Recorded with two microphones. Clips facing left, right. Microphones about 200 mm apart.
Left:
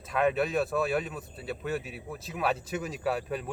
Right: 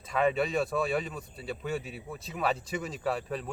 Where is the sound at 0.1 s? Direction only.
Centre (ahead or behind).